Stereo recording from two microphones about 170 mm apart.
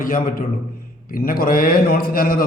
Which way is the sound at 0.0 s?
55° left (ahead or behind).